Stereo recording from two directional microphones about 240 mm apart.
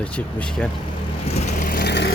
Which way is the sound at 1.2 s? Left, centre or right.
Left.